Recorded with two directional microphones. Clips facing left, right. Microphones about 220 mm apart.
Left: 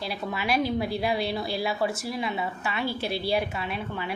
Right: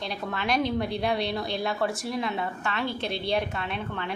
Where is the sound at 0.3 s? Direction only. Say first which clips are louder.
Even; 5° left (ahead or behind).